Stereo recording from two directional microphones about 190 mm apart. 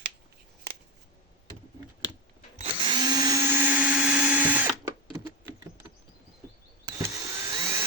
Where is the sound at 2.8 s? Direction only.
20° right (ahead or behind).